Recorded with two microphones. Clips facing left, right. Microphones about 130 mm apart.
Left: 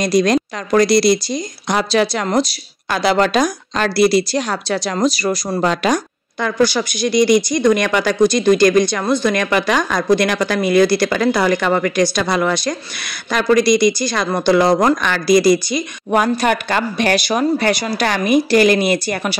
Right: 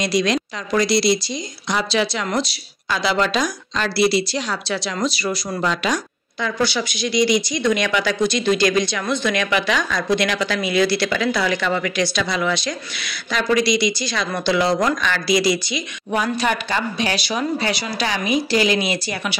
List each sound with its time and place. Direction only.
0.0 s a woman's voice: 45° left (ahead or behind)
2.9 s speech: 50° left (ahead or behind)